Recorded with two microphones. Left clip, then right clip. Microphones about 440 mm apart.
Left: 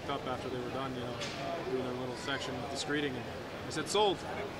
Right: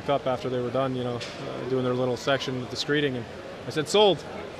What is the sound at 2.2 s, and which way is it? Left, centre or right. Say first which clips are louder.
Speech: right 10 dB; right.